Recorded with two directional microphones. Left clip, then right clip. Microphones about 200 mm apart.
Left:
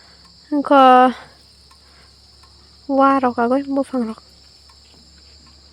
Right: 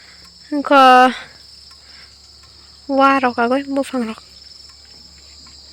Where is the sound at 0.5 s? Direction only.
15° left (ahead or behind).